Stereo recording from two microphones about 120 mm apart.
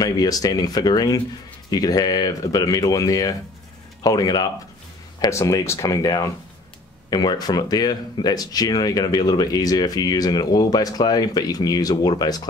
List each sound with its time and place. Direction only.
0.0 s speech: 30° left (ahead or behind)